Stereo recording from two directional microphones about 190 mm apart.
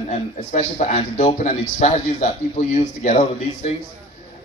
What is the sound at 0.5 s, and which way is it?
A man's voice, 40° left (ahead or behind).